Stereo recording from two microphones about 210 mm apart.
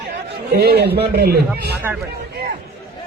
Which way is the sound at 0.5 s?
50° right (ahead or behind).